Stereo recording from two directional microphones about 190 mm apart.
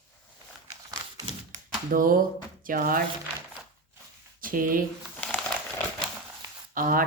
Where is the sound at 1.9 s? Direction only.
45° right (ahead or behind).